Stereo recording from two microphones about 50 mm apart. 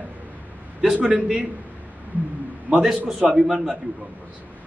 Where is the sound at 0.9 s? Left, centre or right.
Right.